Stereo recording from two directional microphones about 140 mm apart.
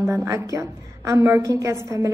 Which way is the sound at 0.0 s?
20° right (ahead or behind).